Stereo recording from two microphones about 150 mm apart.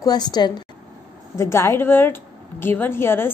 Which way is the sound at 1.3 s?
20° left (ahead or behind).